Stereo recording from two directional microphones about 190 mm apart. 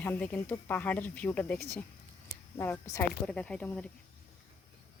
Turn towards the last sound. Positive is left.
turn(degrees=5)  # may be behind; listen again after turning